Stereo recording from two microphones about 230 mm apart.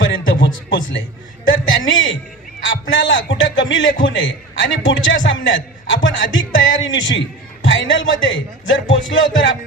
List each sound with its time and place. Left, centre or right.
0.1 s music: left
1.5 s a man's voice: left